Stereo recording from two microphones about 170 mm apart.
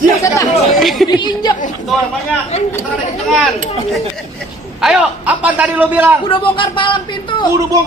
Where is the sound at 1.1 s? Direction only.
25° left (ahead or behind).